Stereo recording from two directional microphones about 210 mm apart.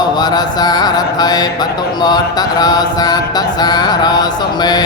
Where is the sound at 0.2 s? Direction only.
20° left (ahead or behind).